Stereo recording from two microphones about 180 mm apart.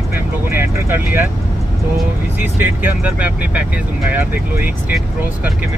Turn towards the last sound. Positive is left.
turn(degrees=-10)  # may be behind; listen again after turning